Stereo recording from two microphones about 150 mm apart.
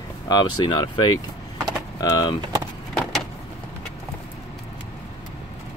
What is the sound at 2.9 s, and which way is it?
Vehicle, 5° left (ahead or behind).